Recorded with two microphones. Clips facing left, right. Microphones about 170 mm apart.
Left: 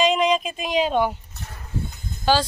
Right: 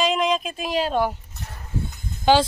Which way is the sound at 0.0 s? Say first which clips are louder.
Left 2 dB; centre (ahead or behind).